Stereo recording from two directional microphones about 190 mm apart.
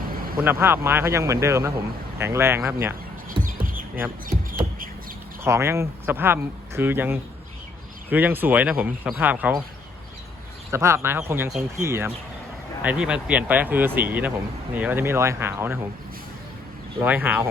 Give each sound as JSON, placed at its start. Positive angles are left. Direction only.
{"t": 0.4, "sound": "speech", "side_deg": -10}
{"t": 3.2, "sound": "music", "side_deg": -45}
{"t": 5.4, "sound": "speech", "side_deg": -15}
{"t": 10.7, "sound": "speech", "side_deg": -15}
{"t": 17.0, "sound": "speech", "side_deg": -10}